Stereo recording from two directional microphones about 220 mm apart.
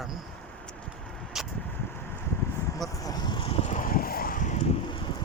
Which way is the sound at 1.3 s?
Centre (ahead or behind).